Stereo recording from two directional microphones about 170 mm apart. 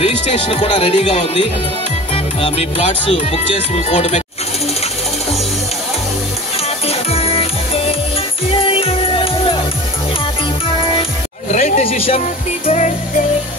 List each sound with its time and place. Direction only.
0.0 s speech: 35° left (ahead or behind)
6.9 s music: 35° left (ahead or behind)
11.5 s a sound: 40° left (ahead or behind)
12.6 s music: 45° left (ahead or behind)